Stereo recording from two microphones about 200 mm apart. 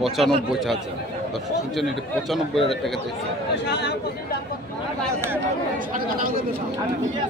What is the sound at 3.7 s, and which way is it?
Speech, 55° left (ahead or behind).